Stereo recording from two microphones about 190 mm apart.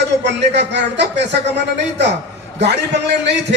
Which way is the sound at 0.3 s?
65° right (ahead or behind).